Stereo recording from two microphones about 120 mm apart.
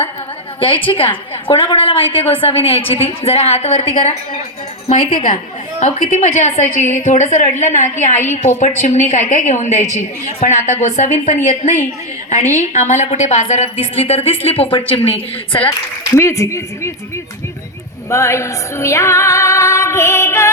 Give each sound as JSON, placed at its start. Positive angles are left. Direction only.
{"t": 0.9, "sound": "a woman's voice", "side_deg": 45}
{"t": 4.9, "sound": "a woman's voice", "side_deg": 80}
{"t": 8.5, "sound": "a woman's voice", "side_deg": 80}
{"t": 16.1, "sound": "speech", "side_deg": 25}
{"t": 18.1, "sound": "music", "side_deg": 25}